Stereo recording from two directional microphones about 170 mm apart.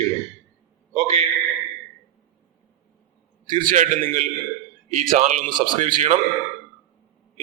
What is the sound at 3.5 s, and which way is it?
Speech, 50° right (ahead or behind).